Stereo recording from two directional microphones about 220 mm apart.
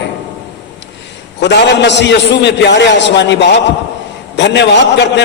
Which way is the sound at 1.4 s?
50° left (ahead or behind).